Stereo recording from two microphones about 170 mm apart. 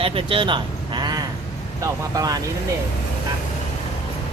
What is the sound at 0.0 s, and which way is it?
Speech, 30° right (ahead or behind).